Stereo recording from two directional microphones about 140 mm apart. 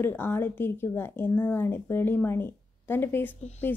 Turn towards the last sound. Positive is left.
turn(degrees=15)  # may be behind; listen again after turning